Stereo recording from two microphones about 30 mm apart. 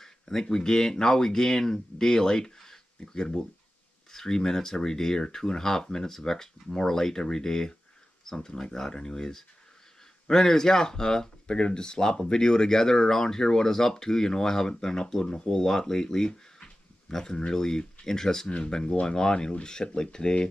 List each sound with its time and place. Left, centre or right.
0.0 s speech: centre
16.3 s a sound: left
17.1 s speech: centre